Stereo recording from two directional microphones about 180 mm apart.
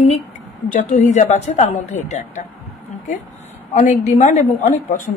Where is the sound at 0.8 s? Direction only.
40° left (ahead or behind).